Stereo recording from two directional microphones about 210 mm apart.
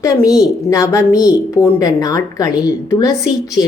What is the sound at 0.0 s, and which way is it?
A woman's voice, 15° left (ahead or behind).